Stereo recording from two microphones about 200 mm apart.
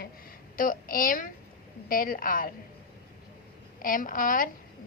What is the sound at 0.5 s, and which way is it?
A woman's voice, 45° left (ahead or behind).